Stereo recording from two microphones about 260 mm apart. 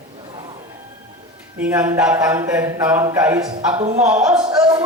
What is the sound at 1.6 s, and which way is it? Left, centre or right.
Speech, centre.